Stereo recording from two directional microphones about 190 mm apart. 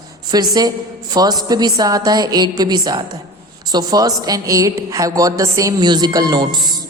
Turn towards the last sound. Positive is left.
turn(degrees=-25)  # may be behind; listen again after turning